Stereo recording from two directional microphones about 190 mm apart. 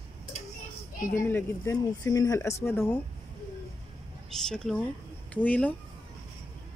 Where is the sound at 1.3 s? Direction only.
10° left (ahead or behind).